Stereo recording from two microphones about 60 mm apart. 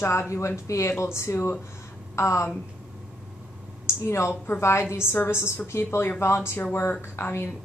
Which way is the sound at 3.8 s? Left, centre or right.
Left.